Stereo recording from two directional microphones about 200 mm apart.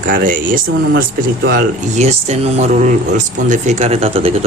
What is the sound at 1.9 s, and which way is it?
Speech, 35° right (ahead or behind).